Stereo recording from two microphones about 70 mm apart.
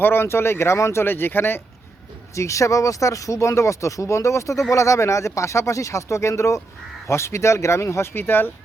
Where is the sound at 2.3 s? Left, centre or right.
Left.